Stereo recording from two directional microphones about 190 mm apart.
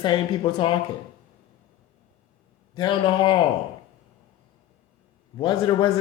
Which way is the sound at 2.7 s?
25° left (ahead or behind).